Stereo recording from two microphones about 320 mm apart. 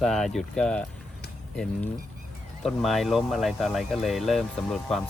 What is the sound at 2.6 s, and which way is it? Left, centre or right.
Speech, centre.